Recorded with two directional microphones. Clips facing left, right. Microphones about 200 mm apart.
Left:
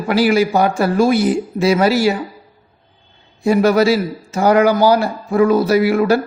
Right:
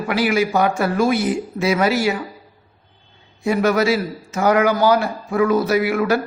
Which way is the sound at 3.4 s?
35° left (ahead or behind).